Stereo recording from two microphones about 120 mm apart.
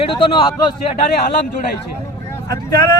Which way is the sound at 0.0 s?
45° left (ahead or behind).